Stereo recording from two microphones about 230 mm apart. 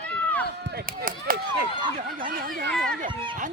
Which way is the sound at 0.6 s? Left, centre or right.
Right.